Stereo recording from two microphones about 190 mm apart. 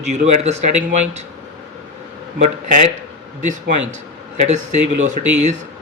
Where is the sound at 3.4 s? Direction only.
40° right (ahead or behind).